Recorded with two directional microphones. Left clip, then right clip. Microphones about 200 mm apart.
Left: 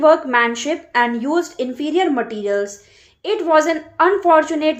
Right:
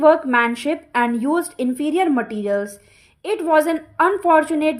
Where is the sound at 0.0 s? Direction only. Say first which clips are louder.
Left 1 dB; 40° right (ahead or behind).